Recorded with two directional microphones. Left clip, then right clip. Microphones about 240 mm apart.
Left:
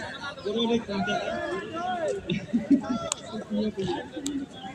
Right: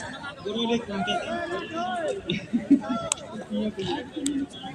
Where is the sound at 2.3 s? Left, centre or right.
Right.